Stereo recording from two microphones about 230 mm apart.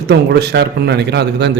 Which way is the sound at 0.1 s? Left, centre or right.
Right.